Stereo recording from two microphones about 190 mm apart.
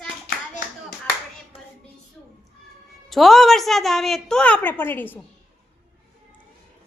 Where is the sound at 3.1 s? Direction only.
Centre (ahead or behind).